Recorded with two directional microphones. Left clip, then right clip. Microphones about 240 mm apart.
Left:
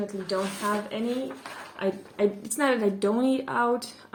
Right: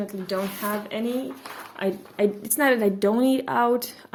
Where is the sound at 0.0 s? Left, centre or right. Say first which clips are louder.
Right 1 dB; right.